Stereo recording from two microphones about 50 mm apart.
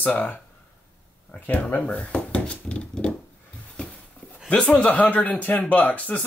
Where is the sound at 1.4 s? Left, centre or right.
Left.